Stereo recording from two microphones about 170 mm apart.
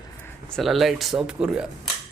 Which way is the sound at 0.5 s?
Centre (ahead or behind).